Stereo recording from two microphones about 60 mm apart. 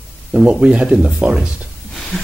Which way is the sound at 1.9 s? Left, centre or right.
Centre.